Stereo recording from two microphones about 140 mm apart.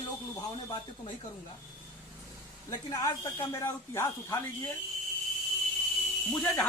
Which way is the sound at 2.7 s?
25° left (ahead or behind).